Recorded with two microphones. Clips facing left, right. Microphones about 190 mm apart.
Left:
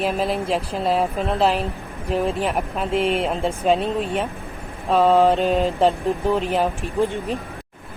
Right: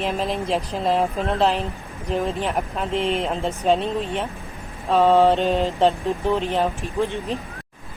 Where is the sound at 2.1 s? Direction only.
5° left (ahead or behind).